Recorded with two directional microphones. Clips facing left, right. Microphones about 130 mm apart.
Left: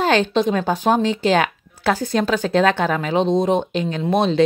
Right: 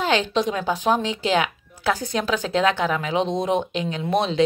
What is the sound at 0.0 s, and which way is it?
A woman's voice, 45° left (ahead or behind).